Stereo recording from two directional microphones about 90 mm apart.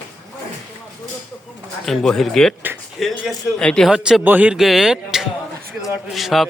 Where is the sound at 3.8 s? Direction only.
5° right (ahead or behind).